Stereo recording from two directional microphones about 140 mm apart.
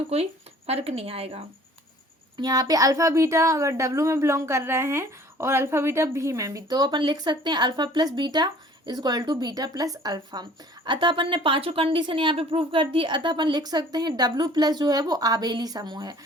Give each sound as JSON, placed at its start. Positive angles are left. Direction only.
{"t": 0.1, "sound": "a woman's voice", "side_deg": -45}
{"t": 2.4, "sound": "a woman's voice", "side_deg": -30}